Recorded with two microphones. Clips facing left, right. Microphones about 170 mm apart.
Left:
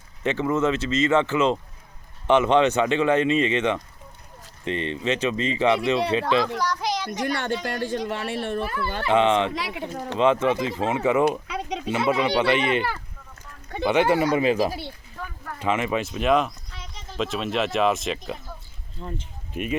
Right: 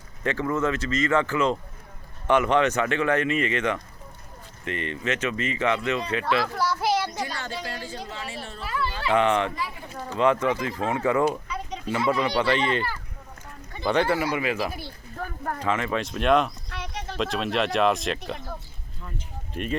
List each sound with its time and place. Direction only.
0.2 s speech: 20° left (ahead or behind)
6.6 s a sound: 5° right (ahead or behind)
7.3 s speech: 65° left (ahead or behind)
9.0 s speech: 20° left (ahead or behind)
9.5 s speech: 80° left
10.2 s speech: 20° left (ahead or behind)
11.3 s speech: 75° left (ahead or behind)
11.9 s speech: 20° left (ahead or behind)
13.8 s speech: 15° left (ahead or behind); by 14.8 s 35° left (ahead or behind)
15.6 s speech: 15° left (ahead or behind)
16.6 s a sound: 70° right (ahead or behind)
17.2 s speech: centre (ahead or behind)
18.9 s speech: 25° left (ahead or behind)